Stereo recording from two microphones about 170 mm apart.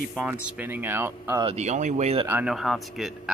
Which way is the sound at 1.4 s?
40° right (ahead or behind).